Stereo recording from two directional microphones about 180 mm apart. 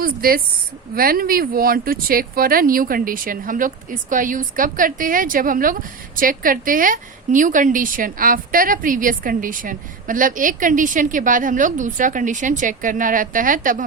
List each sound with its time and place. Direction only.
0.0 s a woman's voice: 55° right (ahead or behind)